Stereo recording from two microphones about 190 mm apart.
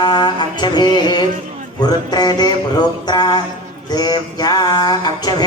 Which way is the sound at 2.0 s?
20° left (ahead or behind).